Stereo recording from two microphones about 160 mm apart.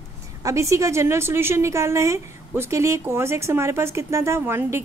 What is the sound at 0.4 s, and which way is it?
A woman's voice, 20° right (ahead or behind).